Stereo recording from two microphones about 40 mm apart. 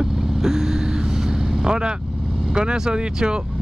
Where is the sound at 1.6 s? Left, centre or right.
Centre.